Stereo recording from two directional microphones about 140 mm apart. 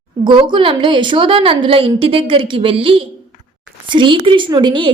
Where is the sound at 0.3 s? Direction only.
35° right (ahead or behind).